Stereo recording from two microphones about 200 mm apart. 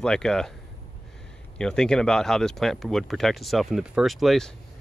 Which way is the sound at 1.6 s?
5° left (ahead or behind).